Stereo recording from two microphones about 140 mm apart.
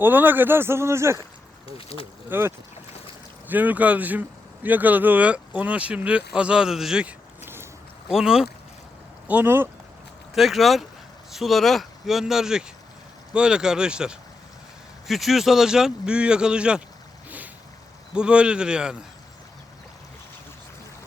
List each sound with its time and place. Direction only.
0.0 s speech: 15° right (ahead or behind)
1.6 s speech: 40° left (ahead or behind)
2.3 s speech: 15° right (ahead or behind)
3.5 s speech: 10° right (ahead or behind)
7.4 s boat: 15° right (ahead or behind)
8.0 s speech: 5° right (ahead or behind)
10.3 s speech: centre (ahead or behind)
17.2 s a sound: 10° right (ahead or behind)
18.1 s speech: 5° right (ahead or behind)